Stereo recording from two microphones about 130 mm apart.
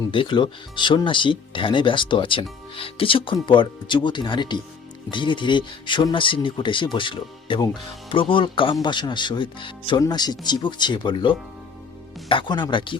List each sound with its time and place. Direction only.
0.1 s speech: 40° left (ahead or behind)